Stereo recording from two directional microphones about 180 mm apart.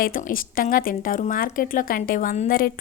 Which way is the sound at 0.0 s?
50° left (ahead or behind).